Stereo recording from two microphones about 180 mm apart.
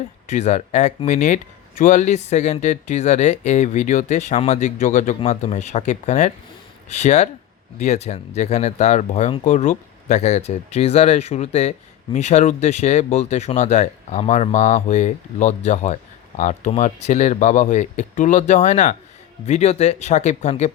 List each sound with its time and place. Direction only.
0.3 s speech: 40° left (ahead or behind)